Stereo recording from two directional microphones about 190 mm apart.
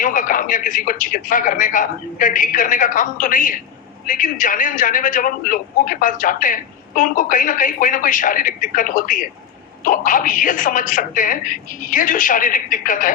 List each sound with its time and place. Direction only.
0.0 s a man's voice: 45° left (ahead or behind)